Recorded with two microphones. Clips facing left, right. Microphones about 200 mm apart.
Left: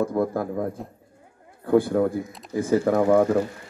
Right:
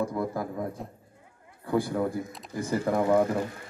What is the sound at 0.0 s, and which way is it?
Speech, 55° left (ahead or behind).